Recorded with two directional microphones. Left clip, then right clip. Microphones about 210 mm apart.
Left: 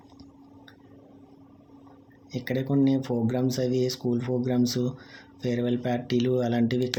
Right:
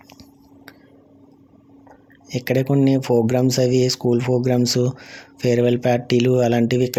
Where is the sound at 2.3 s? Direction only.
40° right (ahead or behind).